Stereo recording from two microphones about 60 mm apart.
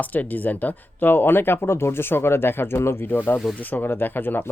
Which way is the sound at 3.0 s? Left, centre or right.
Left.